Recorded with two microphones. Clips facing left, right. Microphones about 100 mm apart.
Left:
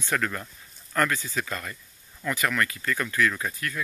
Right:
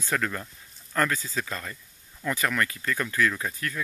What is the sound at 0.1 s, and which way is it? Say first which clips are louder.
Speech: left 1 dB; 10° right (ahead or behind).